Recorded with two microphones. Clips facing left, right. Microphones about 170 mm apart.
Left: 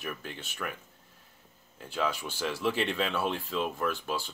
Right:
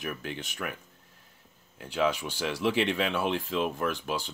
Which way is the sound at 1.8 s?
15° right (ahead or behind).